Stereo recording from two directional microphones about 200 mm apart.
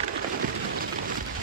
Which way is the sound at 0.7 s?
45° right (ahead or behind).